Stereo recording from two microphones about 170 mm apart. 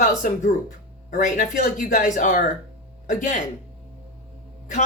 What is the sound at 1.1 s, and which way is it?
Speech, 50° left (ahead or behind).